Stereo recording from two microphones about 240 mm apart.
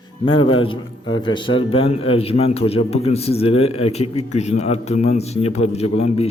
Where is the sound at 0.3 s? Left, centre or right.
Left.